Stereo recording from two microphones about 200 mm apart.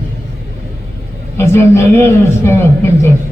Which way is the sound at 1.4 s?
15° left (ahead or behind).